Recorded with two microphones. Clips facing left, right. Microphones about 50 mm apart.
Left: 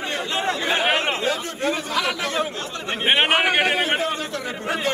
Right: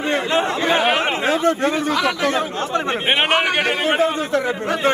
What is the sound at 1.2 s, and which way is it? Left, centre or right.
Speech, right.